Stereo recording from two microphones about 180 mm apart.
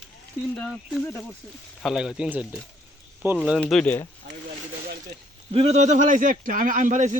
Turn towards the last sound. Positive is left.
turn(degrees=-45)  # may be behind; listen again after turning